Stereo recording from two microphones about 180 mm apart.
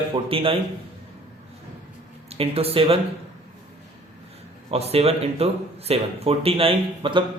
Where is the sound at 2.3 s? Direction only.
35° right (ahead or behind).